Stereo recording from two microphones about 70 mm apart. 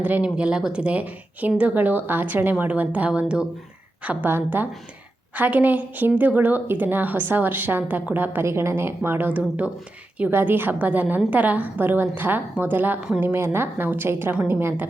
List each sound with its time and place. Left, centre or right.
0.2 s speech: centre
4.3 s speech: right
8.4 s a woman's voice: right